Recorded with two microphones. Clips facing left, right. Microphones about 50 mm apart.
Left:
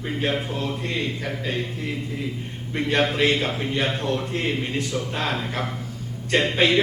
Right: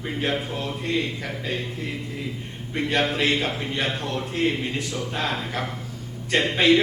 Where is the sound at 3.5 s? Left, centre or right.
Centre.